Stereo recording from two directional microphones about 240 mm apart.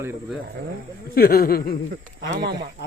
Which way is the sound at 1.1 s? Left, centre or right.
Left.